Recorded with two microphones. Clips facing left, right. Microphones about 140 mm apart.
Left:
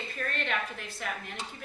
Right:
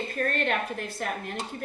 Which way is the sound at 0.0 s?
45° right (ahead or behind).